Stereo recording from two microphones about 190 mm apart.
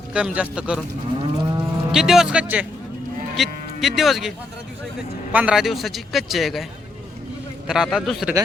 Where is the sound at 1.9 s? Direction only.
Centre (ahead or behind).